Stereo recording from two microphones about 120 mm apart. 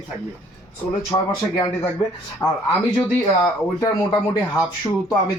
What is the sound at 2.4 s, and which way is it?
Speech, 20° left (ahead or behind).